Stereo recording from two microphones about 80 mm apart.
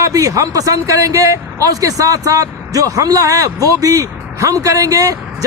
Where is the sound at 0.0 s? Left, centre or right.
Right.